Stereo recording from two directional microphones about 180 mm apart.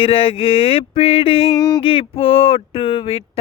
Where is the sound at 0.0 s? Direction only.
30° left (ahead or behind).